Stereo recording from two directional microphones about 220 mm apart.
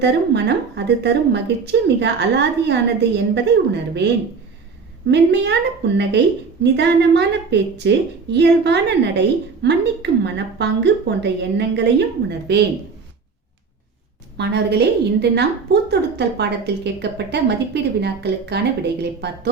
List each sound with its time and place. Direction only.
0.0 s a woman's voice: 50° right (ahead or behind)
14.3 s a woman's voice: 50° right (ahead or behind)